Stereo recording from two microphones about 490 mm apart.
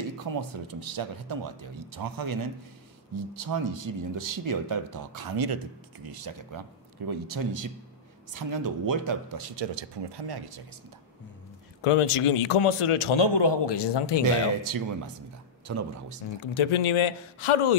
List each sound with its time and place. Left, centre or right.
0.3 s speech: right
3.3 s speech: right
9.6 s speech: right
11.8 s a man's voice: left
14.2 s speech: right
16.5 s a man's voice: left